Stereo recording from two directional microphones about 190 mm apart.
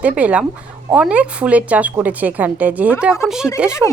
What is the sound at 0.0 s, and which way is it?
A woman's voice, 5° right (ahead or behind).